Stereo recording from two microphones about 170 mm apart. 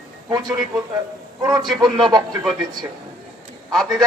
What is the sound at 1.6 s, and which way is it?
Speech, centre (ahead or behind).